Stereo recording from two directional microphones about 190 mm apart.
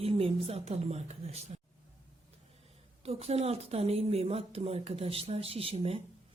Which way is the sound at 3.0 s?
35° right (ahead or behind).